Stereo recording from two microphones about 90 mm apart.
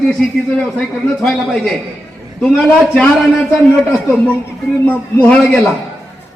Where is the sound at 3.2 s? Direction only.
5° right (ahead or behind).